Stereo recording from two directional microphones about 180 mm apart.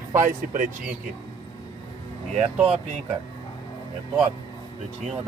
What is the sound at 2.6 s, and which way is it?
Speech, 35° right (ahead or behind).